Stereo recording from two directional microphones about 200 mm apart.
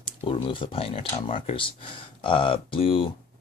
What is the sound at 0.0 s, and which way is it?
Speech, 25° left (ahead or behind).